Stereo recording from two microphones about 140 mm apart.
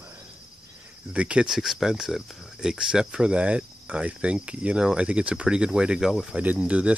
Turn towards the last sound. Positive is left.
turn(degrees=-10)  # may be behind; listen again after turning